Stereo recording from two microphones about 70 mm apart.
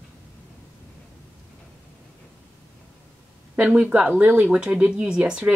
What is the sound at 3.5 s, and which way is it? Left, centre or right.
Speech, centre.